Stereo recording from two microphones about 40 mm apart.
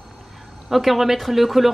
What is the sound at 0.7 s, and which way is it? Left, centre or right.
Speech, centre.